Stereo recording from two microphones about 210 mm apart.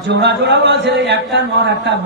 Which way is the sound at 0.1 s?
55° right (ahead or behind).